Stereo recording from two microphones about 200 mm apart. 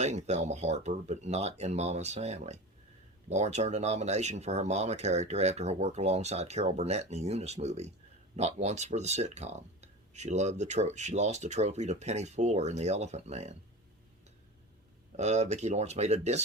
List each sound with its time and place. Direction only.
0.0 s speech: 35° right (ahead or behind)
15.1 s speech: 35° right (ahead or behind)